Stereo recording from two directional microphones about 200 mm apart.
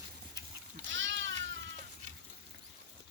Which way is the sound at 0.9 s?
70° right (ahead or behind).